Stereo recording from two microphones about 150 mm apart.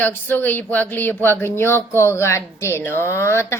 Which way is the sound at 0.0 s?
15° left (ahead or behind).